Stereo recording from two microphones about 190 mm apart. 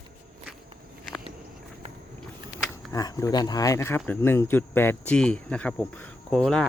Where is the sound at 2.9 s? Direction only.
20° left (ahead or behind).